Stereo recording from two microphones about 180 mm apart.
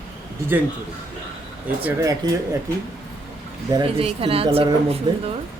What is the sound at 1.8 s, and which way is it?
Speech, 20° right (ahead or behind).